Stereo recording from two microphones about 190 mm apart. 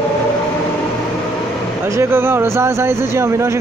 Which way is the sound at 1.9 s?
15° right (ahead or behind).